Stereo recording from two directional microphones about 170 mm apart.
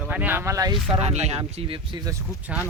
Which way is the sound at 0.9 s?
40° right (ahead or behind).